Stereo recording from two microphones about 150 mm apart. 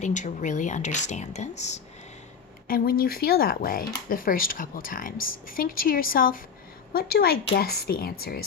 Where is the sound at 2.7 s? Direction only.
80° left.